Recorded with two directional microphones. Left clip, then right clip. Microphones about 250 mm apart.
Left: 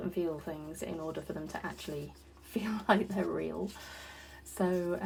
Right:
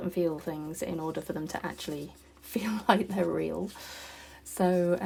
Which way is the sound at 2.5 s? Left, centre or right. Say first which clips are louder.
Right 3 dB; right.